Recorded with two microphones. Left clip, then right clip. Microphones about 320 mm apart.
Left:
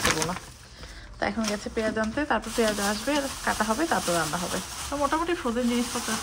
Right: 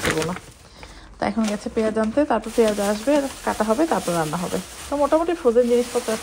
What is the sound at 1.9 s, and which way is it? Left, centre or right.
Speech, right.